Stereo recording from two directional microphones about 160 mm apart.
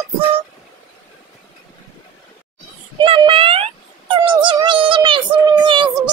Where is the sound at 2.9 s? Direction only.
30° right (ahead or behind).